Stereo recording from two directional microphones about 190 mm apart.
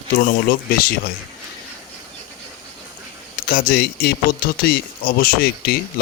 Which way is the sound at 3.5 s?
55° left (ahead or behind).